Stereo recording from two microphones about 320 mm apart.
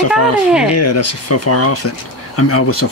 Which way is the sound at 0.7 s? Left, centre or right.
Left.